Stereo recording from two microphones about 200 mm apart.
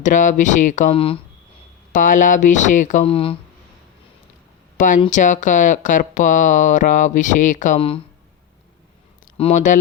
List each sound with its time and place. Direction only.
0.0 s speech: 40° left (ahead or behind)
1.9 s speech: 40° left (ahead or behind)
5.0 s speech: 40° left (ahead or behind)
9.4 s speech: 35° left (ahead or behind)